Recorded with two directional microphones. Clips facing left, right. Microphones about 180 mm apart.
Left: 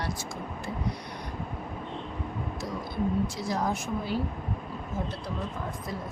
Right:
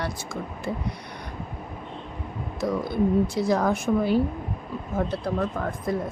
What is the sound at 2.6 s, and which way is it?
Speech, 60° right (ahead or behind).